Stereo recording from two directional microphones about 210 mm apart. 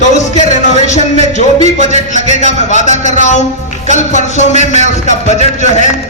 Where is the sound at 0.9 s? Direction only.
35° left (ahead or behind).